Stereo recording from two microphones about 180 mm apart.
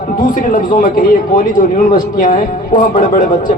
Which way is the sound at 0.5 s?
50° left (ahead or behind).